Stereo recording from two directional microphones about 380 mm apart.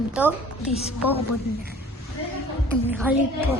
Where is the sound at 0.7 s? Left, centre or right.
Centre.